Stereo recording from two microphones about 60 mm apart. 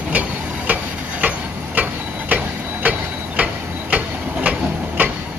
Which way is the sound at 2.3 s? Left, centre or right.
Right.